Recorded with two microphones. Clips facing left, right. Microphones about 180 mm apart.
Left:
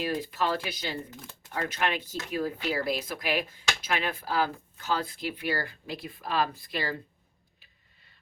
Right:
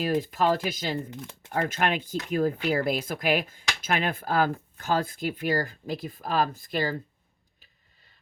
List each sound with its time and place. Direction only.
0.0 s speech: 45° right (ahead or behind)